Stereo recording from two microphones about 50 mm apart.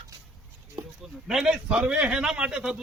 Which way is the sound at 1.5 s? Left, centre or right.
Centre.